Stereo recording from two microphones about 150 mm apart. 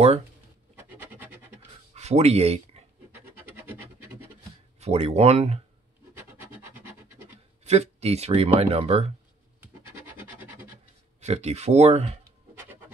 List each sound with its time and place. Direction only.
0.7 s scratch: 15° right (ahead or behind)
2.0 s speech: 45° right (ahead or behind)
3.1 s scratch: 15° right (ahead or behind)
4.7 s speech: 45° right (ahead or behind)
6.1 s scratch: 15° right (ahead or behind)
7.6 s speech: 45° right (ahead or behind)
10.1 s scratch: 15° right (ahead or behind)
11.1 s speech: 45° right (ahead or behind)